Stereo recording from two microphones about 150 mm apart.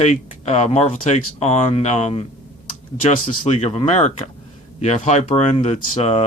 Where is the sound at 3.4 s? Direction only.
45° left (ahead or behind).